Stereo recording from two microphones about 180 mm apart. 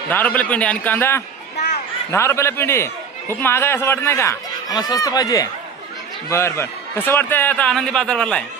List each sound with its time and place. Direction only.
0.1 s a man's voice: 10° left (ahead or behind)